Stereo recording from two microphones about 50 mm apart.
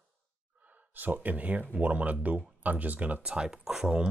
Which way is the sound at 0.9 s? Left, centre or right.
Right.